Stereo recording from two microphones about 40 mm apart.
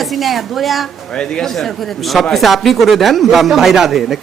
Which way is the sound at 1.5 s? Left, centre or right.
Centre.